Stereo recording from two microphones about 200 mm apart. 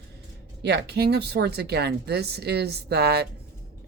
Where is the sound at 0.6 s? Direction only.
55° right (ahead or behind).